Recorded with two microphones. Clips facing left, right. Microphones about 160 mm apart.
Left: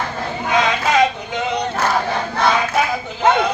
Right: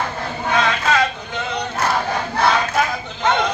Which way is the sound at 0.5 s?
15° left (ahead or behind).